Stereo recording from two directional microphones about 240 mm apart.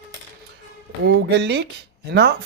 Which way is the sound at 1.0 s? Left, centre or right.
Right.